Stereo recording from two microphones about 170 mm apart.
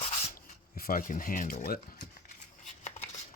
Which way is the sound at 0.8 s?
55° left (ahead or behind).